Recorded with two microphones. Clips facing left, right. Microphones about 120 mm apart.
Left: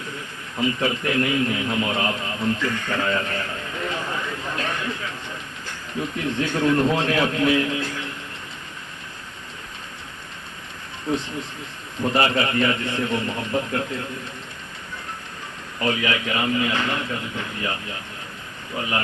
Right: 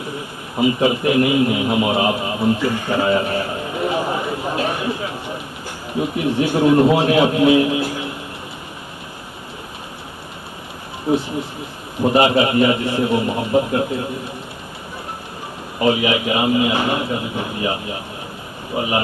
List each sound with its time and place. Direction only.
0.0 s a sound: 15° right (ahead or behind)
5.9 s a man's voice: 15° right (ahead or behind)
11.1 s a man's voice: 10° right (ahead or behind)
15.8 s a man's voice: 20° right (ahead or behind)